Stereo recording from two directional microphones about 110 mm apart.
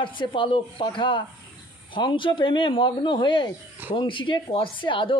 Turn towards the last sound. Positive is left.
turn(degrees=50)  # may be behind; listen again after turning